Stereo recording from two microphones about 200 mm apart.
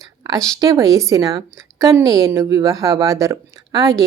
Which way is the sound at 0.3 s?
15° right (ahead or behind).